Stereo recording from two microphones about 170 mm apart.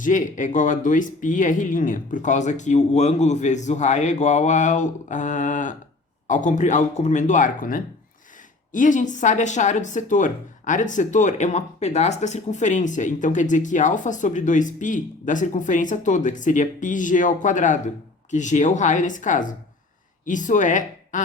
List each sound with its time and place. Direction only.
0.0 s a woman's voice: 50° left (ahead or behind)